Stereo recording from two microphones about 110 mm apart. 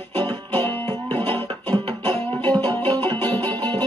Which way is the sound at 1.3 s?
50° right (ahead or behind).